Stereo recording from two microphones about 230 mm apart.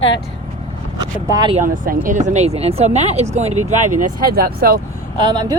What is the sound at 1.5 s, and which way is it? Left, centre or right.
Speech, right.